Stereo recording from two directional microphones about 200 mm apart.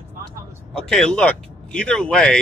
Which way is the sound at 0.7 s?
5° left (ahead or behind).